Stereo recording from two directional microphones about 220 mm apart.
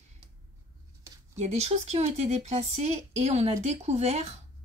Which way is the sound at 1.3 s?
30° right (ahead or behind).